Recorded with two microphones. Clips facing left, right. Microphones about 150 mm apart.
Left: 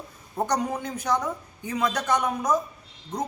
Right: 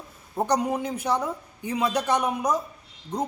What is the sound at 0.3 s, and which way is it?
A woman's voice, 10° right (ahead or behind).